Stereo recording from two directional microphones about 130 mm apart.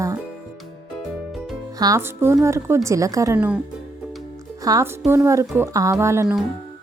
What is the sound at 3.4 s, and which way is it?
Speech, 10° right (ahead or behind).